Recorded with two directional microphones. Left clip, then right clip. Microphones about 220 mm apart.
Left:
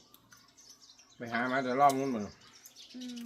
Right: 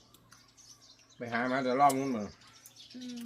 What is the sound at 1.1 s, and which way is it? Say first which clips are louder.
Speech: even; 15° right (ahead or behind).